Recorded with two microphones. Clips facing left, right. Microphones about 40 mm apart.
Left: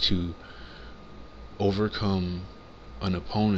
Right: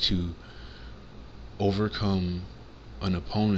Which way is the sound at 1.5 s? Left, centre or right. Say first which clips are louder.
Left 1 dB; centre.